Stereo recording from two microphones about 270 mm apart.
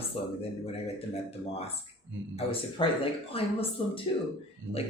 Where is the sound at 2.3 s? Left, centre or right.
Centre.